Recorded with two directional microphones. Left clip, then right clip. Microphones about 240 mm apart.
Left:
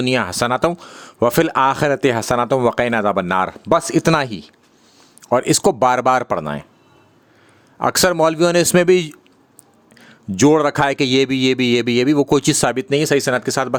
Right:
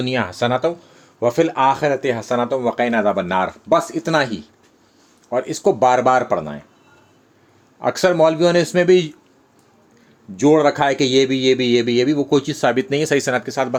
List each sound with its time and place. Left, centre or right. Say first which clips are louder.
0.0 s speech: left 2 dB; left
7.8 s speech: even; left; by 13.5 s centre
13.5 s speech: left 1 dB; left